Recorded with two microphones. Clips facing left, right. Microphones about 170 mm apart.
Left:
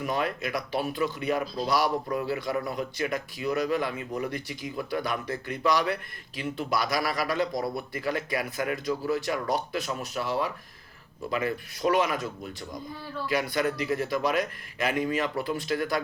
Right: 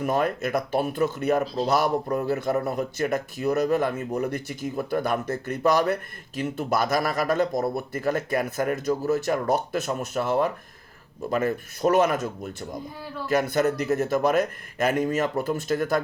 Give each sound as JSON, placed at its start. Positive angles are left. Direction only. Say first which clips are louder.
{"t": 0.0, "sound": "speech", "louder": "right 5 dB", "side_deg": -45}